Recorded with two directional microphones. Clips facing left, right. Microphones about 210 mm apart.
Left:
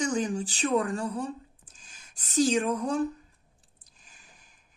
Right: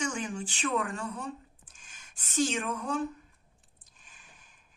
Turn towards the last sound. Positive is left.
turn(degrees=40)  # may be behind; listen again after turning